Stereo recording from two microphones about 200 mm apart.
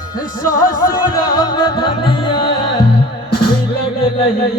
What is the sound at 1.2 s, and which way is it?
Music, 20° left (ahead or behind).